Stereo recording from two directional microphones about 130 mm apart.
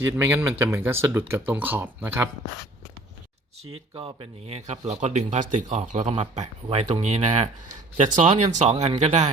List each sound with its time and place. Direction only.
0.0 s speech: 15° right (ahead or behind)
3.9 s speech: 45° right (ahead or behind); by 6.1 s 65° right (ahead or behind)
6.1 s speech: 55° right (ahead or behind)